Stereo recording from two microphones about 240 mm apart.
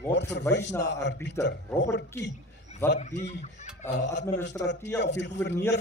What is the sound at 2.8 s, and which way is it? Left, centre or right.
Speech, left.